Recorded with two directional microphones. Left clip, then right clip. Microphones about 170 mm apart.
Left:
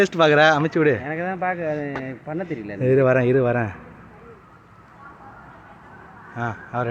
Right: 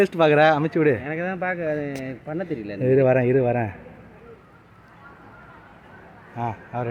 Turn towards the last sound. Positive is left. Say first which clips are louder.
# left 2 dB
turn(degrees=-10)  # may be behind; listen again after turning